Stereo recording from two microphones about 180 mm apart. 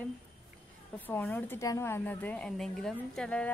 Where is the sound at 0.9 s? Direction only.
10° left (ahead or behind).